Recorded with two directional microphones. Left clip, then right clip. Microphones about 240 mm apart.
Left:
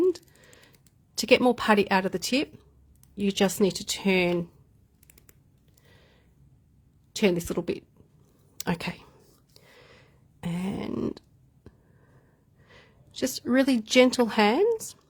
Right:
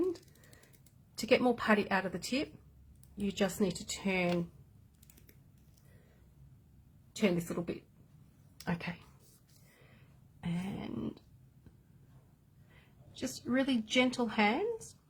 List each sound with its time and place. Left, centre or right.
1.1 s a woman's voice: left
7.1 s a woman's voice: left
10.4 s throat clearing: left
13.1 s speech: left